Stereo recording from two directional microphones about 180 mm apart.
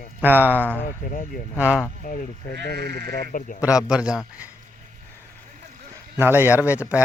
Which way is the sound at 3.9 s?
5° right (ahead or behind).